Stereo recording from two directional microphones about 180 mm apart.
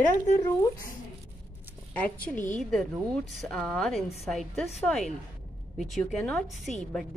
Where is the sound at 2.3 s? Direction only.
45° left (ahead or behind).